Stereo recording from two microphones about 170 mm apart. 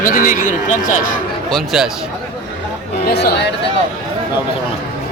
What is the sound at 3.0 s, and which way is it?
Speech, 75° left (ahead or behind).